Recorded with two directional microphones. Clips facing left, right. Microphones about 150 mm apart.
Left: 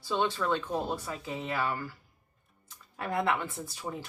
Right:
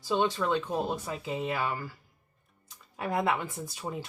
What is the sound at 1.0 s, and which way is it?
Speech, 15° right (ahead or behind).